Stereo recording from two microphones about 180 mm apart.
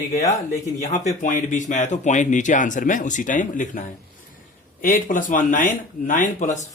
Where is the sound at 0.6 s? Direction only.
40° left (ahead or behind).